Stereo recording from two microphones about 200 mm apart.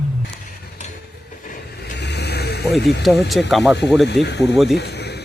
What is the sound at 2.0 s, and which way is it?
Vehicle, 55° left (ahead or behind).